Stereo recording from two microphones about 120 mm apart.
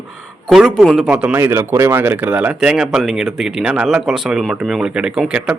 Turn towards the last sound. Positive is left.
turn(degrees=-5)  # may be behind; listen again after turning